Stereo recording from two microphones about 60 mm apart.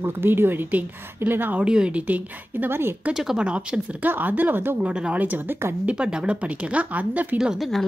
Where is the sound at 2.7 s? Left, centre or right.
Right.